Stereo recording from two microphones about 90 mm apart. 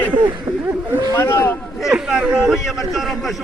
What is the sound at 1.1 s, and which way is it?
Speech, 25° left (ahead or behind).